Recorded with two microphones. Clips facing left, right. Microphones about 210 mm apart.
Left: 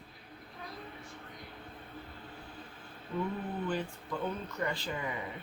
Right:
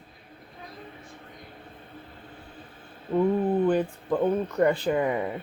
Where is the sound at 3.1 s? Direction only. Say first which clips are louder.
Right 13 dB; 55° right (ahead or behind).